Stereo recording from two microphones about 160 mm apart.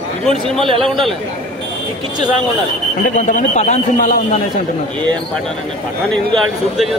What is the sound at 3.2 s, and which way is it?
Speech, 45° left (ahead or behind).